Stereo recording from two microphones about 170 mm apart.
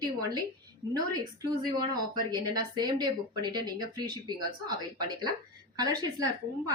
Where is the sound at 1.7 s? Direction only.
25° right (ahead or behind).